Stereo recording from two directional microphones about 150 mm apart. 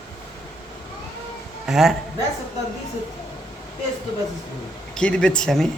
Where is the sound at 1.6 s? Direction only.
Centre (ahead or behind).